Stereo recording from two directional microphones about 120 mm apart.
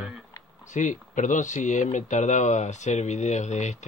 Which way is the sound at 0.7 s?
90° left.